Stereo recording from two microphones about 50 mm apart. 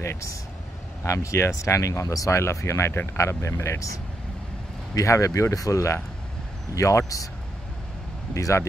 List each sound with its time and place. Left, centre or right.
0.0 s speech: left
1.0 s speech: left
5.0 s speech: left
8.4 s speech: left